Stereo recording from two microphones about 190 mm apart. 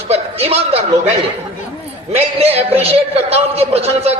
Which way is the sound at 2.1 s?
35° right (ahead or behind).